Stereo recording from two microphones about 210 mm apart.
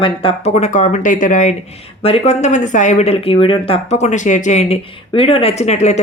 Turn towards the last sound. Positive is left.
turn(degrees=30)  # may be behind; listen again after turning